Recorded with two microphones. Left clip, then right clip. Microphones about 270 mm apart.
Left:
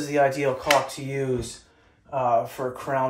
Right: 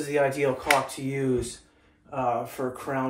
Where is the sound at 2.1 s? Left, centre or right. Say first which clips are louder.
Left 5 dB; centre.